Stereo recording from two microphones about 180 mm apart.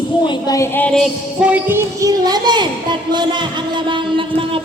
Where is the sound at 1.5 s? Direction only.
10° right (ahead or behind).